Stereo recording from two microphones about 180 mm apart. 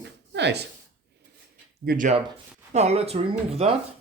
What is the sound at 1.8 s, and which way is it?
Speech, 60° right (ahead or behind).